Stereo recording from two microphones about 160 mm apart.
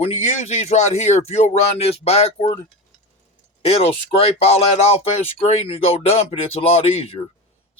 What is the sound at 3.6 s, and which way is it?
Speech, 40° left (ahead or behind).